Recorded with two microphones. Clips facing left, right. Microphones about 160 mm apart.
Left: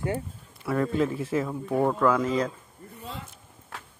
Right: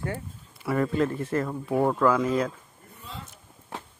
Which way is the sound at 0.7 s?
Centre (ahead or behind).